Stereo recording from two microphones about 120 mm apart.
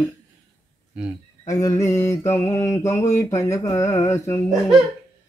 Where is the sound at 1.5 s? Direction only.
30° left (ahead or behind).